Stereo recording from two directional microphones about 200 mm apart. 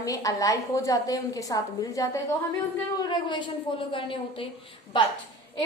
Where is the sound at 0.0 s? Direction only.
15° left (ahead or behind).